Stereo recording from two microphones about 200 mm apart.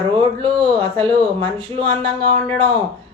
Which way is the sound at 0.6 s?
20° right (ahead or behind).